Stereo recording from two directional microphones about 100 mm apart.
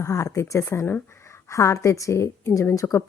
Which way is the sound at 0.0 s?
30° left (ahead or behind).